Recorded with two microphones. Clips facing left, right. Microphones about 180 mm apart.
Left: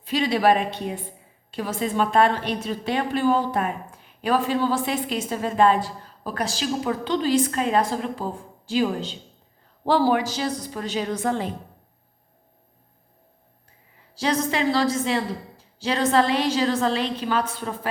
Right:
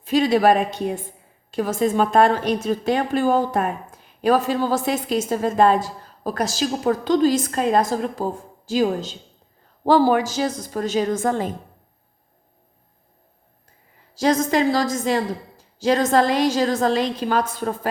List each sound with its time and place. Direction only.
0.0 s a woman's voice: 45° right (ahead or behind)
14.2 s a woman's voice: 45° right (ahead or behind)